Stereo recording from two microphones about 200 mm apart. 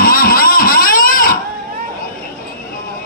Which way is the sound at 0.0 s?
50° left (ahead or behind).